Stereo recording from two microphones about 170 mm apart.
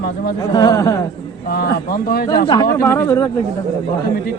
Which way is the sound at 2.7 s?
15° left (ahead or behind).